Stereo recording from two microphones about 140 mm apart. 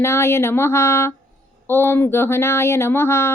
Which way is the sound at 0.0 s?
20° left (ahead or behind).